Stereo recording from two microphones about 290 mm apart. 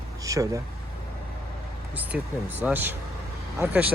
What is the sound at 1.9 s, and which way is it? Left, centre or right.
Speech, centre.